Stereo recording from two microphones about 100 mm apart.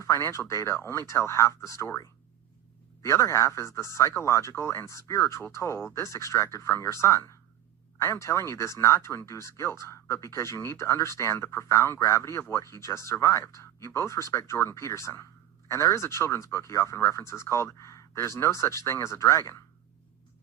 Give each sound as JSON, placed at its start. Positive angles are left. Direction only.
{"t": 0.0, "sound": "speech", "side_deg": 30}
{"t": 3.0, "sound": "speech", "side_deg": 30}